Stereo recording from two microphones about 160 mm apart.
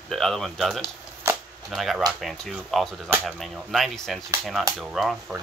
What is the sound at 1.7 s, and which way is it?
Speech, centre (ahead or behind).